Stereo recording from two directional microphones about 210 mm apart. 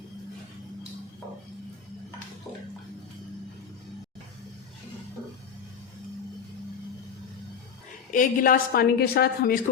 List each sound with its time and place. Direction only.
8.1 s a woman's voice: 40° left (ahead or behind)